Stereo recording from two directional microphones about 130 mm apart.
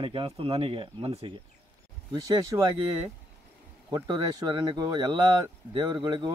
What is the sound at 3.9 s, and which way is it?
Speech, 30° right (ahead or behind).